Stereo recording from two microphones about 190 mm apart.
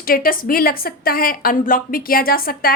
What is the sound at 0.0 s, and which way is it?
A woman's voice, 50° left (ahead or behind).